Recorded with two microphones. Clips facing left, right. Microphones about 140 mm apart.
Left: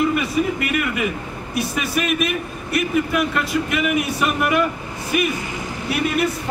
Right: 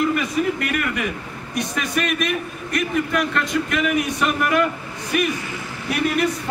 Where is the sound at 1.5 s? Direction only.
5° left (ahead or behind).